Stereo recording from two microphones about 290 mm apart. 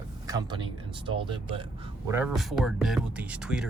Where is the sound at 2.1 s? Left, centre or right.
Centre.